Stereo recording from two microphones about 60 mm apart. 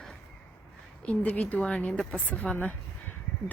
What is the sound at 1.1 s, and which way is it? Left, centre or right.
Speech, left.